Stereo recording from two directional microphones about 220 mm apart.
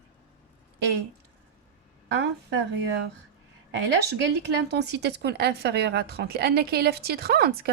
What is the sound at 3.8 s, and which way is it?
Speech, 55° right (ahead or behind).